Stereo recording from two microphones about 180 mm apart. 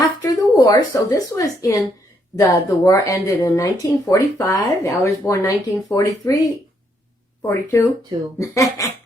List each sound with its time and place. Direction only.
0.2 s speech: 20° left (ahead or behind)
7.4 s speech: 15° left (ahead or behind)